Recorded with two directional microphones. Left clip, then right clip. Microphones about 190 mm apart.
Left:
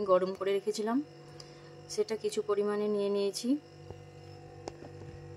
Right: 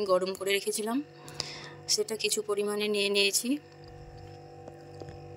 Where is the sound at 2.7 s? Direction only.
55° right (ahead or behind).